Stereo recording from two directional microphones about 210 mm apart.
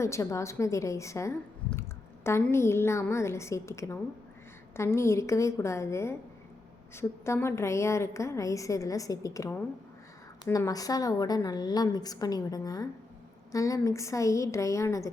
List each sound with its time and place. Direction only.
0.0 s a woman's voice: 15° left (ahead or behind)